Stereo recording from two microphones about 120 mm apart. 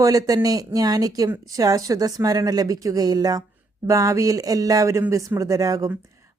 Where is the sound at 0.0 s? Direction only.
30° right (ahead or behind).